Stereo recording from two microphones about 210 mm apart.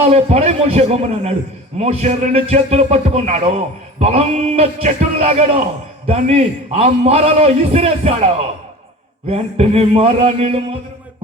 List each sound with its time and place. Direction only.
0.0 s a man's voice: 30° right (ahead or behind)
9.3 s a man's voice: 30° right (ahead or behind)